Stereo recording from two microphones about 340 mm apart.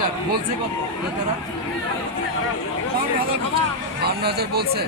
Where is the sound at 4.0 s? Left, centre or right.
Right.